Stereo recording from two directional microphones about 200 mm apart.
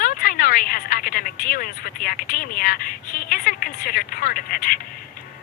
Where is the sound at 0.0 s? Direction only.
45° left (ahead or behind).